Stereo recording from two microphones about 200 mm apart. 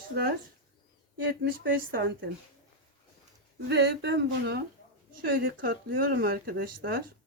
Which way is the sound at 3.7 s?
55° right (ahead or behind).